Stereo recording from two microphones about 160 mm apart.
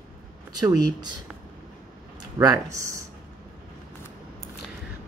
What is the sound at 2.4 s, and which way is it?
Speech, 20° right (ahead or behind).